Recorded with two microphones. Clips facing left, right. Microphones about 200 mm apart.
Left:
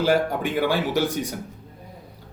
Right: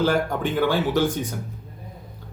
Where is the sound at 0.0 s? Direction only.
10° left (ahead or behind).